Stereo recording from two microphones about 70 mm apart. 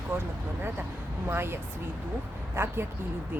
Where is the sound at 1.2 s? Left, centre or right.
Right.